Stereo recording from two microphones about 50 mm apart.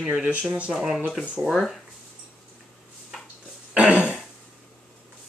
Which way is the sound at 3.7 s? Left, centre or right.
Right.